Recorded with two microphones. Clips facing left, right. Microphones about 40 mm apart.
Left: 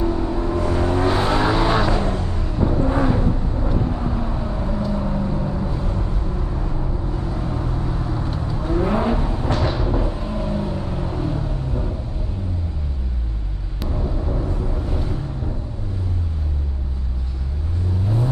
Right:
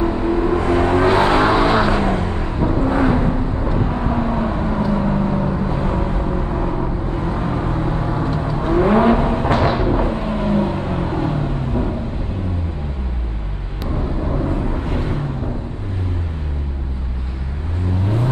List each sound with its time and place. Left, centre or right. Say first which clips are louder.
0.0 s vehicle: right 5 dB; right
14.3 s vehicle: right 5 dB; right
18.0 s vehicle: right 2 dB; right